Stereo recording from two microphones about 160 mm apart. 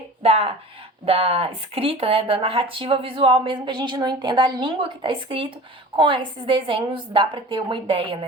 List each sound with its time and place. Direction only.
0.2 s speech: 40° right (ahead or behind)